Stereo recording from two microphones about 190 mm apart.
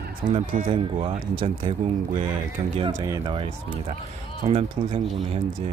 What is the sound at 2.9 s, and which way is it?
Speech, 15° right (ahead or behind).